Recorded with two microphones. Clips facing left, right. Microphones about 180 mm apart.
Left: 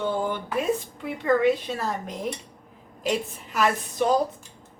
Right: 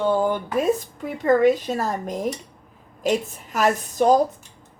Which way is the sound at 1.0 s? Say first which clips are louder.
Right 4 dB; 45° right (ahead or behind).